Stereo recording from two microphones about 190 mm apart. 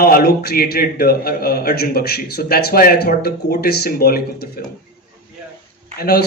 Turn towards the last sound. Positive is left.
turn(degrees=55)  # may be behind; listen again after turning